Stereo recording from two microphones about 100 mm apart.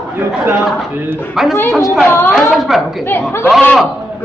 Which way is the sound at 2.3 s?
Centre (ahead or behind).